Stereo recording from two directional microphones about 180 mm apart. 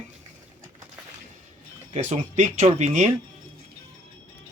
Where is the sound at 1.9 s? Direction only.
40° right (ahead or behind).